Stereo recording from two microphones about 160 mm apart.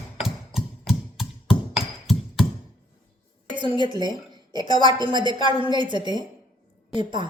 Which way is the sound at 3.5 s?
30° right (ahead or behind).